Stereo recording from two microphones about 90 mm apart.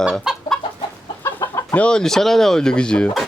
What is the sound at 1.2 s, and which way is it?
Chicken, 30° left (ahead or behind).